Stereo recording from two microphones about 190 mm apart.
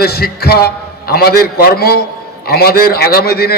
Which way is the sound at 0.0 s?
55° left (ahead or behind).